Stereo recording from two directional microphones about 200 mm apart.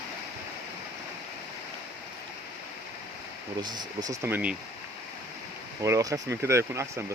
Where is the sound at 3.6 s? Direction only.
20° right (ahead or behind).